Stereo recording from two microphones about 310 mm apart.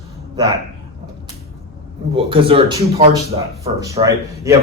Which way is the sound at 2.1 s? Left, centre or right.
Centre.